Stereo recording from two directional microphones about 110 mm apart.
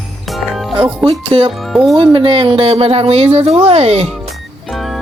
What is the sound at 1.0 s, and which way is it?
Speech, 55° right (ahead or behind).